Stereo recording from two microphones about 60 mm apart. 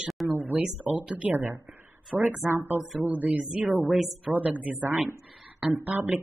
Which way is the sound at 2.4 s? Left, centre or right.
Right.